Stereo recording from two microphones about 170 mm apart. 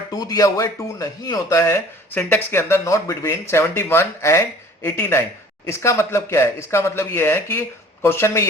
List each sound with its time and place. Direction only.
0.1 s speech: 20° left (ahead or behind)